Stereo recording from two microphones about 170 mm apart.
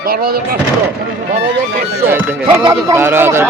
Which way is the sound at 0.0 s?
60° right (ahead or behind).